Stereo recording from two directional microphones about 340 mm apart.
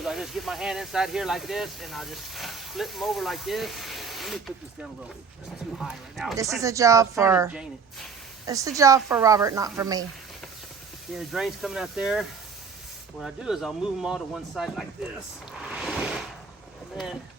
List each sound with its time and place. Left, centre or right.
0.0 s speech: centre
11.1 s speech: centre
13.2 s speech: centre
15.6 s a sound: centre